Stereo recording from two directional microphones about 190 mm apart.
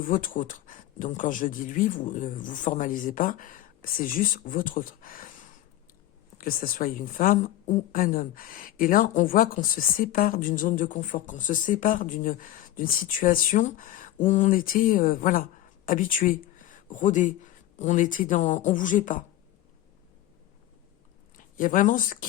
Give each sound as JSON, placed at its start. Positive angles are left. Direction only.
{"t": 0.1, "sound": "a woman's voice", "side_deg": 45}
{"t": 21.3, "sound": "speech", "side_deg": 45}